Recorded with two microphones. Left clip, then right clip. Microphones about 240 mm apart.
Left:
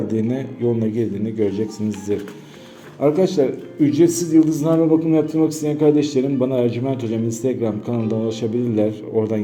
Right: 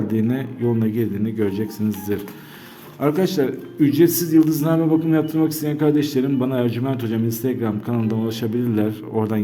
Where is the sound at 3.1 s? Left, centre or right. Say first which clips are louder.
Left 3 dB; right.